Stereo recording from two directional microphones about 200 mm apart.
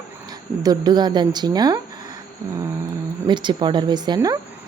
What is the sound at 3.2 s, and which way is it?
Speech, 25° right (ahead or behind).